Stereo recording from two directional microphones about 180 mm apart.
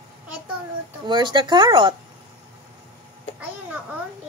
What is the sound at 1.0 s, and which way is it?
Speech, 25° right (ahead or behind).